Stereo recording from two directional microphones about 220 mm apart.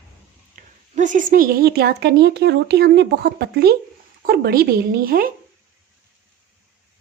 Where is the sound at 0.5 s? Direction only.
35° right (ahead or behind).